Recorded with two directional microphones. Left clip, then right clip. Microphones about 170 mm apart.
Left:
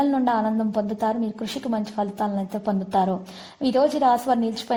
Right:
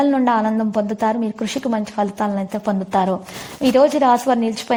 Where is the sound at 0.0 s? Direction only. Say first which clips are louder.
Right 5 dB; 15° right (ahead or behind).